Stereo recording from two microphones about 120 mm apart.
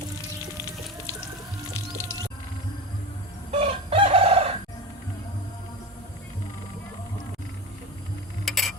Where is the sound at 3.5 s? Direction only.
55° right (ahead or behind).